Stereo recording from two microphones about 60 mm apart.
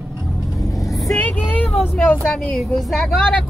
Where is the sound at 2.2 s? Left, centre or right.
Centre.